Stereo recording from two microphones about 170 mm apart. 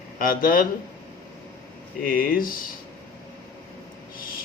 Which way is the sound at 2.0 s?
60° left (ahead or behind).